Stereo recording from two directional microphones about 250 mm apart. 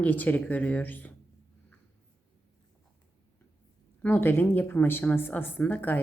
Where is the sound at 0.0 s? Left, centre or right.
Centre.